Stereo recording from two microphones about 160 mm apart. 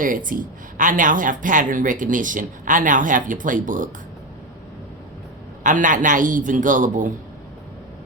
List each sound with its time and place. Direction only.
0.0 s speech: 60° right (ahead or behind)
5.6 s speech: 55° right (ahead or behind)